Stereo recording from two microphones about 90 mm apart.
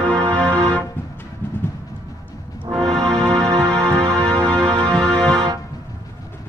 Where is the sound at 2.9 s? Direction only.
40° right (ahead or behind).